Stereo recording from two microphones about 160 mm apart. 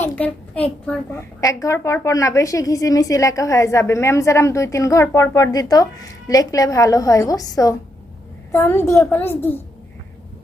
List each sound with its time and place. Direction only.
0.0 s a child's voice: 10° left (ahead or behind)
1.4 s a woman's voice: 20° left (ahead or behind)